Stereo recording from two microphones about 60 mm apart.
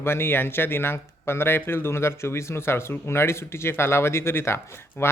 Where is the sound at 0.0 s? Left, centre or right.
Left.